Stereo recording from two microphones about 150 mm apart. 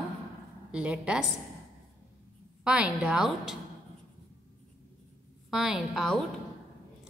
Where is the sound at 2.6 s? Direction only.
5° right (ahead or behind).